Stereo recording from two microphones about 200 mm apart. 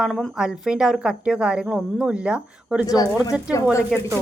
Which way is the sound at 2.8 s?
20° left (ahead or behind).